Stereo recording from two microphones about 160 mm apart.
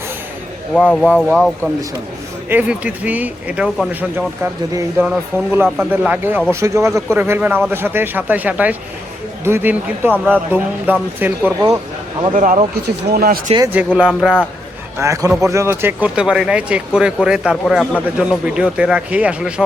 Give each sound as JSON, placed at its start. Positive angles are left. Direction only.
{"t": 0.7, "sound": "speech", "side_deg": 5}
{"t": 2.5, "sound": "speech", "side_deg": -10}
{"t": 12.3, "sound": "speech", "side_deg": -55}
{"t": 13.1, "sound": "speech", "side_deg": -70}
{"t": 13.7, "sound": "speech", "side_deg": -5}
{"t": 14.9, "sound": "a man's voice", "side_deg": -20}